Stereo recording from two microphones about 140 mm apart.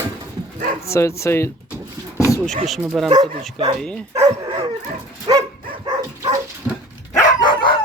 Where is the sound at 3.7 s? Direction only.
5° left (ahead or behind).